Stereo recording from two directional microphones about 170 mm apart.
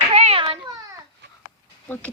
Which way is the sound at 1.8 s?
10° left (ahead or behind).